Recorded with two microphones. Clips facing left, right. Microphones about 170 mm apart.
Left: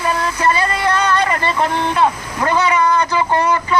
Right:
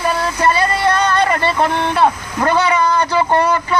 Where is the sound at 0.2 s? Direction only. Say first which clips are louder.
Right 1 dB; 30° right (ahead or behind).